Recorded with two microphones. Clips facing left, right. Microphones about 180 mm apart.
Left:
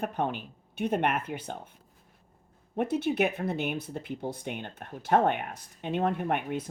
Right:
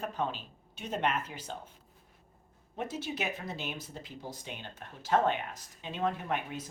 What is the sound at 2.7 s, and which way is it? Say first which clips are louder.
Speech: left 9 dB; 60° left (ahead or behind).